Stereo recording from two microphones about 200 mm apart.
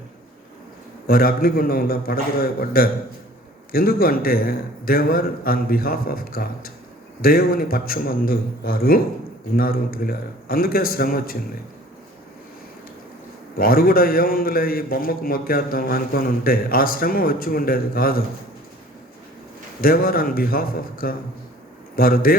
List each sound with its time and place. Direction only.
1.0 s a man's voice: 45° left (ahead or behind)
13.6 s a man's voice: 45° left (ahead or behind)
19.8 s a man's voice: 45° left (ahead or behind)